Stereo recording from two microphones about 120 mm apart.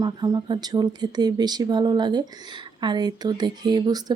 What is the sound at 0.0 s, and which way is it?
Speech, 35° right (ahead or behind).